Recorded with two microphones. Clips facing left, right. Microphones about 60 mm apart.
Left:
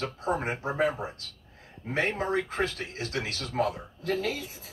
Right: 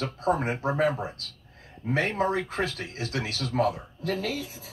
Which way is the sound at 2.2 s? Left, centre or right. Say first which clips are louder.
Right 2 dB; left.